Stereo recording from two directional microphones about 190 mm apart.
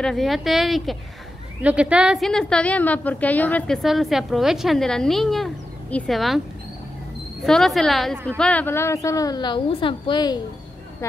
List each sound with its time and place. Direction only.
0.0 s a woman's voice: centre (ahead or behind)
7.4 s a woman's voice: centre (ahead or behind); by 10.4 s 25° left (ahead or behind)